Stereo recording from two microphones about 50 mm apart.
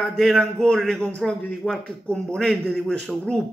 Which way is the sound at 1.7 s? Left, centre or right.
Centre.